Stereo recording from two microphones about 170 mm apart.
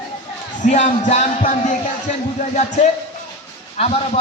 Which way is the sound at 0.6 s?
45° left (ahead or behind).